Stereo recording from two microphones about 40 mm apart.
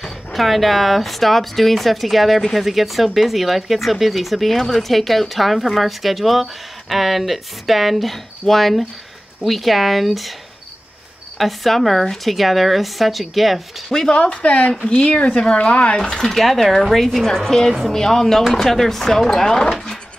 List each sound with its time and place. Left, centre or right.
0.0 s speech: centre
11.3 s speech: centre
14.1 s speech: left
16.0 s speech: centre